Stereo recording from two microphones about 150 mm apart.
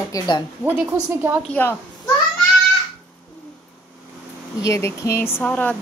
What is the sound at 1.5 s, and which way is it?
Speech, 15° left (ahead or behind).